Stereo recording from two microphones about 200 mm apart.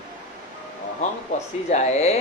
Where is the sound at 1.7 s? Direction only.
30° left (ahead or behind).